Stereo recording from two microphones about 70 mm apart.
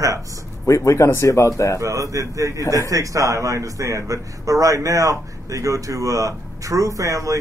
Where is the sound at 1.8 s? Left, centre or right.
Right.